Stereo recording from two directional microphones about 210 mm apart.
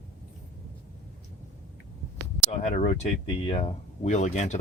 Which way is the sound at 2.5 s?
35° left (ahead or behind).